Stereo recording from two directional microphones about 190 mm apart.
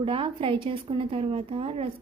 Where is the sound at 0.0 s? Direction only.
30° right (ahead or behind).